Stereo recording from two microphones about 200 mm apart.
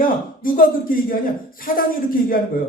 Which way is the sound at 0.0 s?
45° left (ahead or behind).